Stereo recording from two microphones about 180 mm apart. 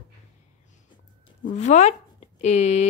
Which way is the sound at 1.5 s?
40° left (ahead or behind).